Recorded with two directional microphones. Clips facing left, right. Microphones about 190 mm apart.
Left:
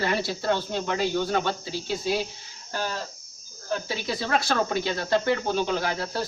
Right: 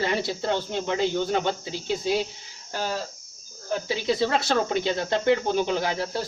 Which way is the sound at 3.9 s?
25° right (ahead or behind).